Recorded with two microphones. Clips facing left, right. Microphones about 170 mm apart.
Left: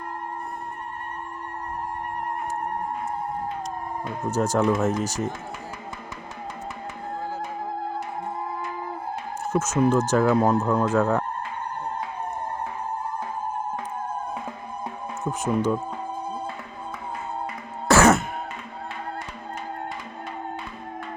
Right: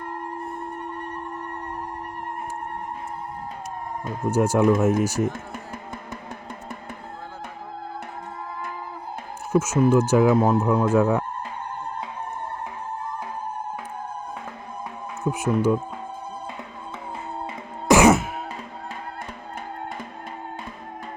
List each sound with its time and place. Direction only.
4.3 s speech: 10° right (ahead or behind)
9.4 s speech: 10° right (ahead or behind)
15.2 s speech: 10° right (ahead or behind)
17.8 s throat clearing: 15° right (ahead or behind)